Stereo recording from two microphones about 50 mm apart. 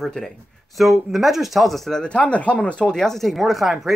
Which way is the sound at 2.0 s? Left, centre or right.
Left.